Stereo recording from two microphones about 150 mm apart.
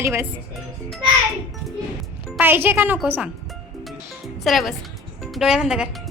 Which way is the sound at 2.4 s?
15° right (ahead or behind).